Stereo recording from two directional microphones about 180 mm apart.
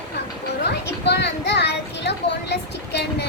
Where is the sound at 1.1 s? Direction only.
70° left (ahead or behind).